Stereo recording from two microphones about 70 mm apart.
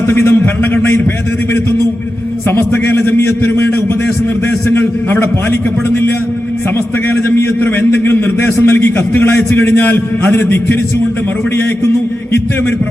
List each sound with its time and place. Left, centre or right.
0.1 s a man's voice: left
2.5 s a man's voice: left
4.7 s a man's voice: left
7.6 s a man's voice: left